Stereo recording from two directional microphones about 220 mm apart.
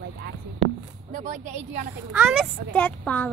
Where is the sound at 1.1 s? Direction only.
35° right (ahead or behind).